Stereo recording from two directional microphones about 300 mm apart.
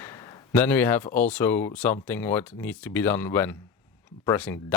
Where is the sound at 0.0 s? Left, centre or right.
Centre.